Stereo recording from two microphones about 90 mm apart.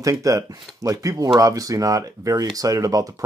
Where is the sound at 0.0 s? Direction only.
40° right (ahead or behind).